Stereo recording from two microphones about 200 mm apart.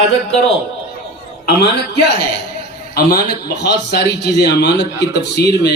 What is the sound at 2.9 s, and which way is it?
A man's voice, 50° left (ahead or behind).